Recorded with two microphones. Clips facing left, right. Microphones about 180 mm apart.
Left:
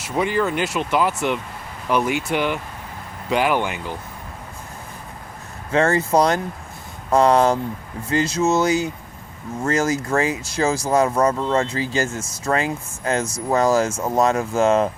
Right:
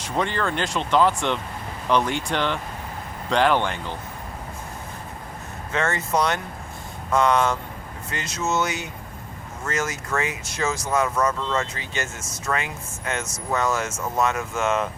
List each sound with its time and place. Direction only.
0.0 s speech: 10° left (ahead or behind)
5.7 s speech: 35° left (ahead or behind)